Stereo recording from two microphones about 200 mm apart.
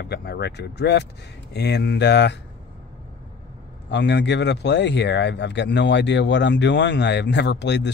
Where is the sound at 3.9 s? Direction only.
60° left (ahead or behind).